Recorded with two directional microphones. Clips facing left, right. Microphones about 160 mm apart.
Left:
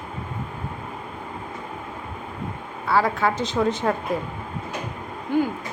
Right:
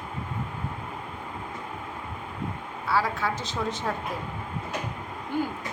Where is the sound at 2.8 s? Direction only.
55° left (ahead or behind).